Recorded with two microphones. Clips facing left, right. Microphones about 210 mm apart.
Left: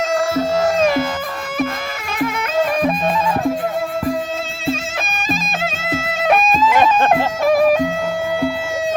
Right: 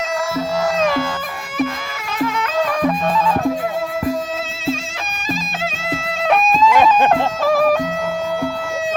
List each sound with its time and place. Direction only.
2.1 s music: 15° left (ahead or behind)
5.8 s music: 5° left (ahead or behind)